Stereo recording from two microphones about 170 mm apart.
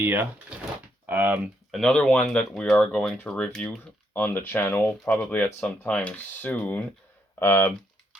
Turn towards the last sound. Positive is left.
turn(degrees=15)  # may be behind; listen again after turning